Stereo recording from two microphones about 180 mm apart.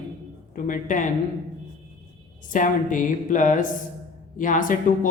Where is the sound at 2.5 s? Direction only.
45° left (ahead or behind).